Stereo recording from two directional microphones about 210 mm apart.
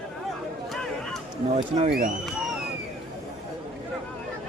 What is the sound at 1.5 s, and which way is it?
Speech, 30° right (ahead or behind).